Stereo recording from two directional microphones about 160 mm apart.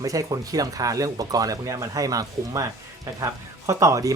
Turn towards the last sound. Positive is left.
turn(degrees=-20)  # may be behind; listen again after turning